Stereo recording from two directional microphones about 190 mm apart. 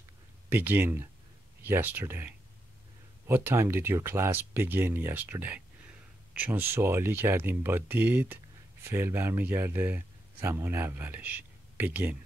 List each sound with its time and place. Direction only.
0.5 s a man's voice: 10° right (ahead or behind)